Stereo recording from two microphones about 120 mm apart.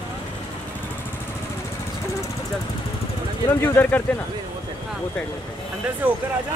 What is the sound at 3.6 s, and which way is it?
Speech, 15° left (ahead or behind).